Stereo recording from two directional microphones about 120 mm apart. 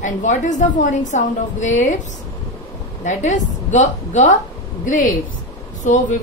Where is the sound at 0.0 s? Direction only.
90° left.